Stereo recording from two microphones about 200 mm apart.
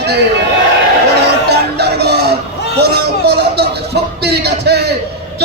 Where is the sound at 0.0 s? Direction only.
55° right (ahead or behind).